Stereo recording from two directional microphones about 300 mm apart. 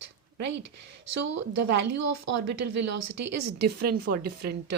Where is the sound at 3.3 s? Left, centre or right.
Right.